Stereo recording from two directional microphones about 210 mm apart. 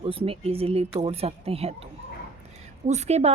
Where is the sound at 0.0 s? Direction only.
25° right (ahead or behind).